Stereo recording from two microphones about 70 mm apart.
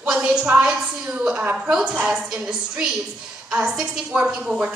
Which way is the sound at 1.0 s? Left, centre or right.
Centre.